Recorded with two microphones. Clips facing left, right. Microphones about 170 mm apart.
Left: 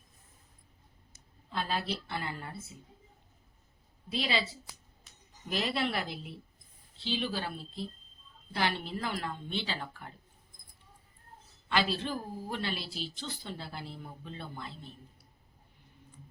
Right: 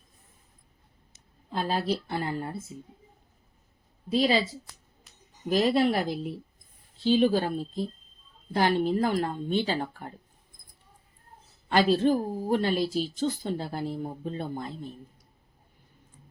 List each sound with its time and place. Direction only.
1.5 s a woman's voice: 40° right (ahead or behind)
4.1 s a woman's voice: 40° right (ahead or behind)
5.5 s a woman's voice: 40° right (ahead or behind)
11.7 s speech: 45° right (ahead or behind)